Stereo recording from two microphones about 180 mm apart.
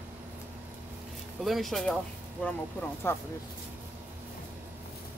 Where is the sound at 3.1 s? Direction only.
15° left (ahead or behind).